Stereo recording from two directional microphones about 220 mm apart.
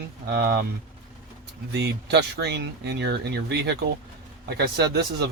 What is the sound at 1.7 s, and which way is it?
Speech, 50° right (ahead or behind).